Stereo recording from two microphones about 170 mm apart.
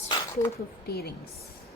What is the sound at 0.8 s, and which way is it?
Speech, 65° left (ahead or behind).